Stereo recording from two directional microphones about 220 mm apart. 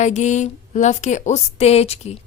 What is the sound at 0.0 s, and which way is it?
A woman's voice, 30° left (ahead or behind).